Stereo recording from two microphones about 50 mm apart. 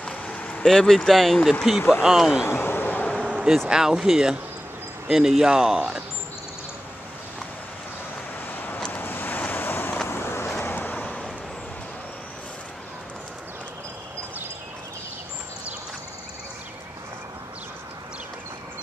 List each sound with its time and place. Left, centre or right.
0.0 s vehicle: left
0.7 s speech: centre
2.4 s a sound: left
3.3 s vehicle: centre
3.6 s speech: centre
8.5 s vehicle: left
9.5 s wind: left
10.0 s vehicle: left
10.6 s vehicle: left